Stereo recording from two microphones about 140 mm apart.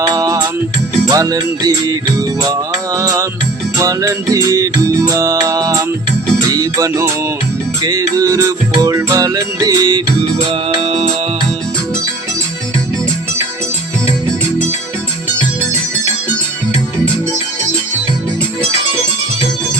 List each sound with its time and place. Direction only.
0.0 s music: 25° right (ahead or behind); by 11.1 s 40° right (ahead or behind)